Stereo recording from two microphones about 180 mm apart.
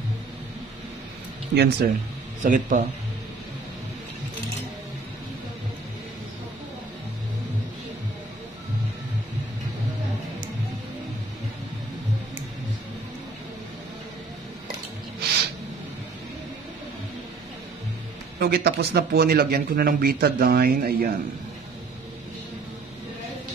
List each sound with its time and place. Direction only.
1.5 s speech: 65° right (ahead or behind)
2.4 s speech: 45° right (ahead or behind)
18.4 s speech: 65° right (ahead or behind)